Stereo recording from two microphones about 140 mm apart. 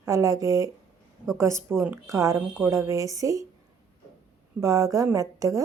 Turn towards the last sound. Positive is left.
turn(degrees=-25)  # may be behind; listen again after turning